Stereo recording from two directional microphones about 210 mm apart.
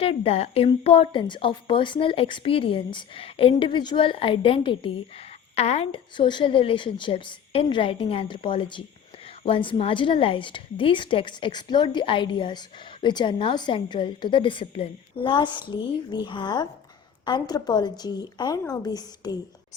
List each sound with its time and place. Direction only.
0.0 s a woman's voice: 30° left (ahead or behind)